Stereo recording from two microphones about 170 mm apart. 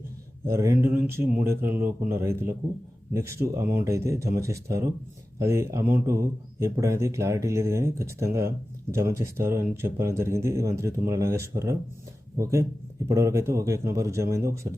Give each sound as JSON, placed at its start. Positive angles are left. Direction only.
{"t": 0.4, "sound": "speech", "side_deg": -15}